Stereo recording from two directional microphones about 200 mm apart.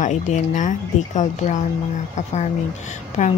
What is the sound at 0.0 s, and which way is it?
Speech, 35° left (ahead or behind).